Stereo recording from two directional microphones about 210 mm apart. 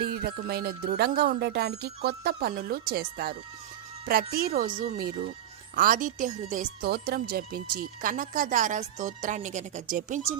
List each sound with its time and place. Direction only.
0.0 s speech: 45° right (ahead or behind)
5.7 s speech: 40° right (ahead or behind)